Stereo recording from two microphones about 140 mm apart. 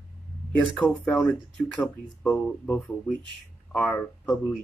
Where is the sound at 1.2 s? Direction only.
10° left (ahead or behind).